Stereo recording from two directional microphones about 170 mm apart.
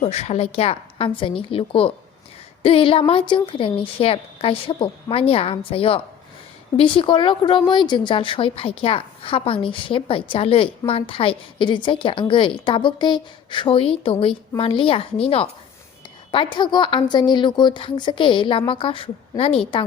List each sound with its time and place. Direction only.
0.0 s a woman's voice: 40° left (ahead or behind)